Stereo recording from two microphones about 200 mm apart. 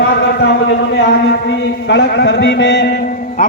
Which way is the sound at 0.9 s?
60° left (ahead or behind).